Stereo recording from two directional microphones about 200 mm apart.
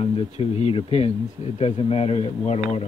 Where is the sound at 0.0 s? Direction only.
30° left (ahead or behind).